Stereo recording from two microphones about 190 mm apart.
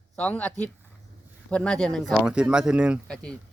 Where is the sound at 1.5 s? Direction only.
5° left (ahead or behind).